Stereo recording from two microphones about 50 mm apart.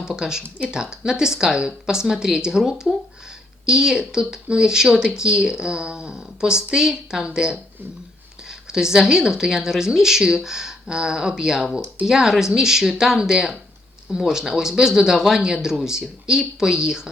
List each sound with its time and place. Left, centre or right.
0.2 s speech: centre